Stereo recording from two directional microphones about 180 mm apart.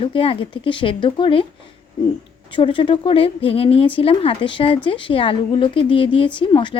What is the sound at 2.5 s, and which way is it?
Speech, 30° left (ahead or behind).